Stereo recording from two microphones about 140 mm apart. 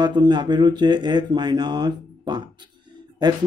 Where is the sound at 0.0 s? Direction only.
30° right (ahead or behind).